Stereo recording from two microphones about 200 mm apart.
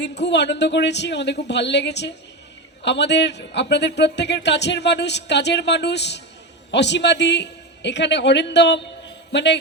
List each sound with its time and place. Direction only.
0.0 s a man's voice: 60° left (ahead or behind)